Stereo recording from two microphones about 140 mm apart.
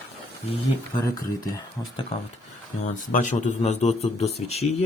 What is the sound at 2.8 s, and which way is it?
A man's voice, 60° left (ahead or behind).